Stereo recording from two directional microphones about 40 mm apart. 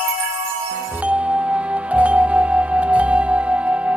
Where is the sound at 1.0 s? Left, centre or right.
Right.